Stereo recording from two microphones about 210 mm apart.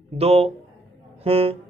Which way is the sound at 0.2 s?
30° right (ahead or behind).